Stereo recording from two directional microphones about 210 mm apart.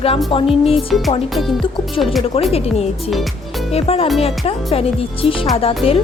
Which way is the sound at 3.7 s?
30° left (ahead or behind).